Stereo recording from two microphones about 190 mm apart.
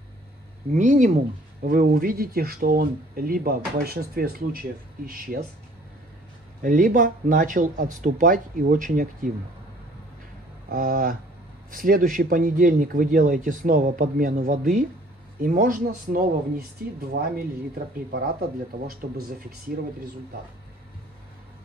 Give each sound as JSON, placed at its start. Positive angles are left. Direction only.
{"t": 0.7, "sound": "speech", "side_deg": -40}
{"t": 6.6, "sound": "speech", "side_deg": -45}
{"t": 10.7, "sound": "speech", "side_deg": -50}